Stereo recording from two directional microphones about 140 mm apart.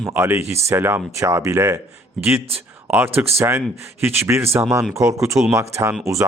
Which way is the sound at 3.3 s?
20° right (ahead or behind).